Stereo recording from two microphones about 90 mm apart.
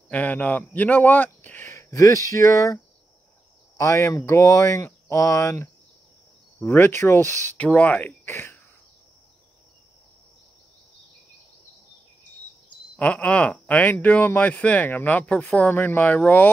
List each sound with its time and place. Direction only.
0.1 s speech: 15° left (ahead or behind)
1.7 s speech: 35° left (ahead or behind)
7.5 s speech: 15° left (ahead or behind)
13.0 s speech: 15° left (ahead or behind)